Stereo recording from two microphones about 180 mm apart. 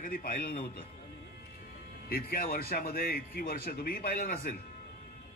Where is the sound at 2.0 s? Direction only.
55° left (ahead or behind).